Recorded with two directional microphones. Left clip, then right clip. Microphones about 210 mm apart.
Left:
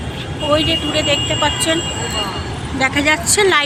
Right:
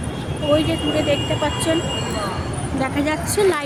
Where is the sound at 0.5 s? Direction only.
Centre (ahead or behind).